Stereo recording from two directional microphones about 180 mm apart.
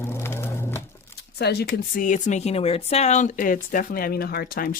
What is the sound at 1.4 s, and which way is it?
Speech, 65° left (ahead or behind).